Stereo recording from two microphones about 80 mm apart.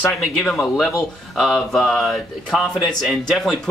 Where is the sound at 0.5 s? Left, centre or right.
Centre.